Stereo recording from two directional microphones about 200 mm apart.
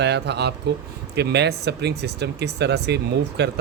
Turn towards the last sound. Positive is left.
turn(degrees=-55)  # may be behind; listen again after turning